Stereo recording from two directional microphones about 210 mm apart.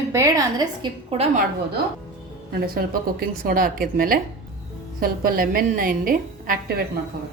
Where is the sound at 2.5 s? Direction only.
45° right (ahead or behind).